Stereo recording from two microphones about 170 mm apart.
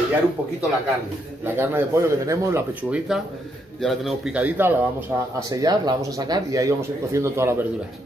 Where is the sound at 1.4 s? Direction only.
15° right (ahead or behind).